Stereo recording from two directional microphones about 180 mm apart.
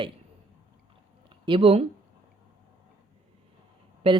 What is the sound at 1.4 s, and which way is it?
Speech, 30° right (ahead or behind).